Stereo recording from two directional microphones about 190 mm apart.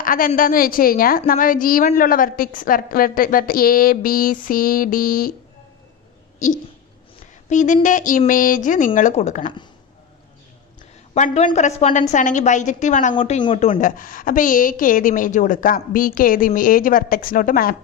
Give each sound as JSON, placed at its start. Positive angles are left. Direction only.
{"t": 0.0, "sound": "a woman's voice", "side_deg": 45}
{"t": 7.5, "sound": "a woman's voice", "side_deg": 40}
{"t": 10.8, "sound": "a woman's voice", "side_deg": 35}
{"t": 13.1, "sound": "a woman's voice", "side_deg": 30}